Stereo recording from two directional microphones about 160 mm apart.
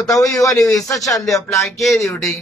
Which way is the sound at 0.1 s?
20° left (ahead or behind).